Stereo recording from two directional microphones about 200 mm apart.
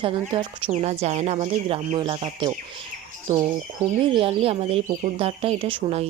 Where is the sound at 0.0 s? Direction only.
25° right (ahead or behind).